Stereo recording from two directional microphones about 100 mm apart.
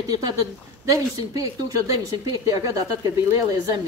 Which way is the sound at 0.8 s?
35° right (ahead or behind).